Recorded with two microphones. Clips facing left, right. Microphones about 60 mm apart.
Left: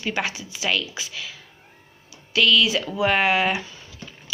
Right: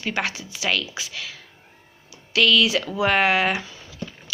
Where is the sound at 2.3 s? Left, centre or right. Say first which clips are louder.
Right 1 dB; right.